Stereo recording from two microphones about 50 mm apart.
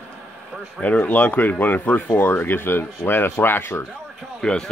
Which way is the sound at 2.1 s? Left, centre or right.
Left.